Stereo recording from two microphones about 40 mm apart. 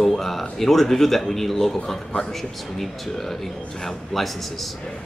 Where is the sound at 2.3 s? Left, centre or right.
Centre.